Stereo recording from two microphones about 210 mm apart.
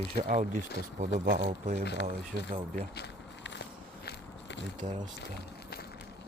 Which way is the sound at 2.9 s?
55° left (ahead or behind).